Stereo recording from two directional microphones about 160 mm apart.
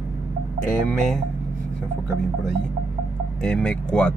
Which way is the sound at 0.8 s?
Centre (ahead or behind).